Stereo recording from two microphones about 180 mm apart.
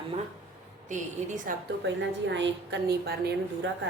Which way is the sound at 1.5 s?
50° right (ahead or behind).